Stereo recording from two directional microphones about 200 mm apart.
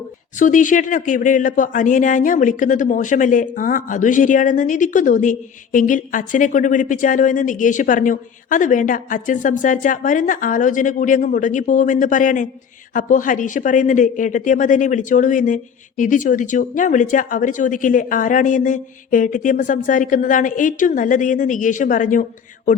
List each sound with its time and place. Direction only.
0.3 s speech: 40° left (ahead or behind)